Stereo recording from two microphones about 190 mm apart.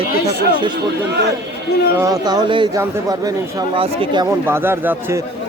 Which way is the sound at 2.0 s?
20° right (ahead or behind).